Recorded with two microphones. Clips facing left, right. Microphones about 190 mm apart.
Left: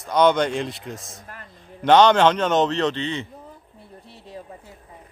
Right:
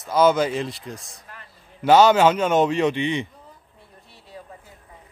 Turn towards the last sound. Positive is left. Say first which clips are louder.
# right 2 dB
turn(degrees=-15)  # may be behind; listen again after turning